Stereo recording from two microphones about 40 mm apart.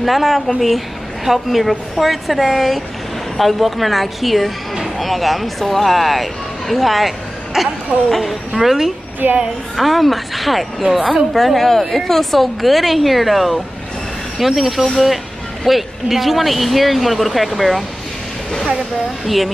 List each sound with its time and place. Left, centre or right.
0.0 s a woman's voice: centre
9.2 s a woman's voice: right
9.8 s speech: centre
19.2 s speech: centre